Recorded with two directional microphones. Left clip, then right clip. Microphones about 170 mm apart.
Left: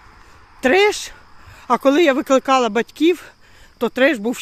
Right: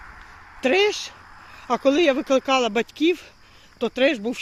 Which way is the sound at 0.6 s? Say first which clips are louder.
Left 5 dB; 40° left (ahead or behind).